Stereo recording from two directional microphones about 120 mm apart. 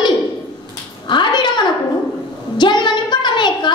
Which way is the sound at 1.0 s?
40° left (ahead or behind).